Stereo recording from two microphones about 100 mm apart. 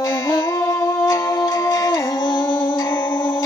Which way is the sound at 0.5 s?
30° left (ahead or behind).